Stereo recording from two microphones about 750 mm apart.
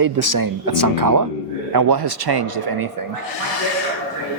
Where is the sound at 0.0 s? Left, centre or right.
Right.